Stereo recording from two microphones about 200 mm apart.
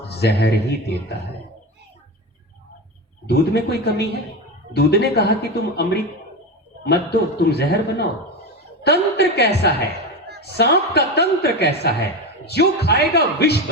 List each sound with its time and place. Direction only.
0.1 s a man's voice: 55° left (ahead or behind)
3.2 s a man's voice: 55° left (ahead or behind)